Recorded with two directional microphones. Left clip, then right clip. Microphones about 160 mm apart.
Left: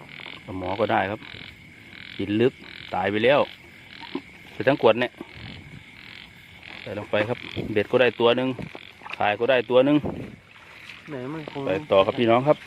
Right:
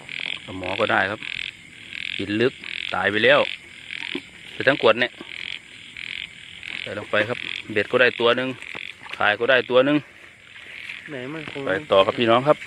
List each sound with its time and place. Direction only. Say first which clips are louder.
0.6 s speech: right 2 dB; 5° left (ahead or behind)
4.5 s speech: right 2 dB; 15° left (ahead or behind)
7.1 s speech: right 2 dB; 15° left (ahead or behind)
9.1 s speech: right 3 dB; 5° left (ahead or behind)
11.1 s speech: left 1 dB; 10° right (ahead or behind)
11.6 s speech: right 2 dB; 10° left (ahead or behind)